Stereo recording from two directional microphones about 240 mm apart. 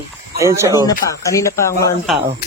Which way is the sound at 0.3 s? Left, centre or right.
Centre.